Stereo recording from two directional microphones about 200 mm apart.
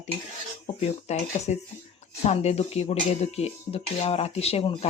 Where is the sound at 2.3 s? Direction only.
30° left (ahead or behind).